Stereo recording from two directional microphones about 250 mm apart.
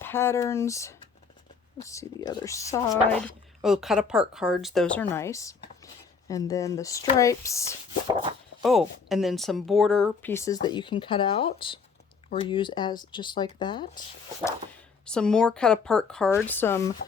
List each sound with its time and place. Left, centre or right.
0.0 s speech: centre
8.6 s speech: centre
15.0 s speech: centre